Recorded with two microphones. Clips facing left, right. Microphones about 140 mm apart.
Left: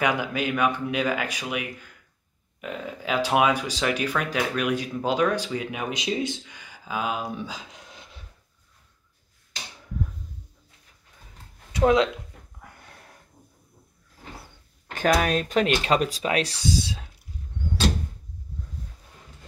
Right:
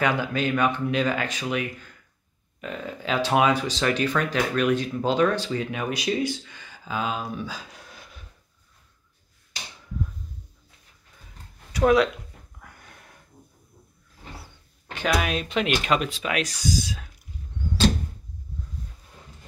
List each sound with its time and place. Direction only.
0.0 s speech: 15° left (ahead or behind)
11.7 s speech: 25° left (ahead or behind)
12.6 s sniff: 30° left (ahead or behind)
14.9 s speech: 45° left (ahead or behind); by 17.1 s 30° left (ahead or behind)